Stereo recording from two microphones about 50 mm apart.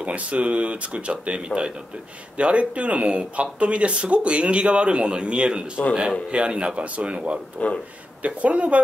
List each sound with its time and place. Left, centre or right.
0.0 s speech: right
7.6 s speech: left
8.2 s speech: right